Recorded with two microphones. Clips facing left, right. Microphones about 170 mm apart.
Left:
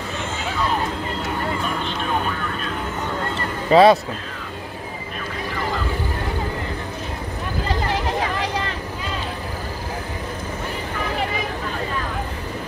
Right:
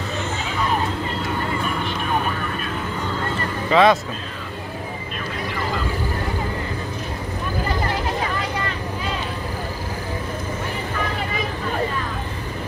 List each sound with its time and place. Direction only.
3.7 s speech: 35° left (ahead or behind)